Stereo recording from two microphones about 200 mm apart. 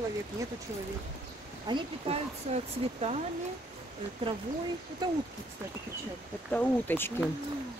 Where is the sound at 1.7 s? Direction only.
25° right (ahead or behind).